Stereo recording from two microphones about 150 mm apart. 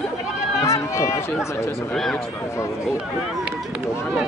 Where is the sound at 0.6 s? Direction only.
20° left (ahead or behind).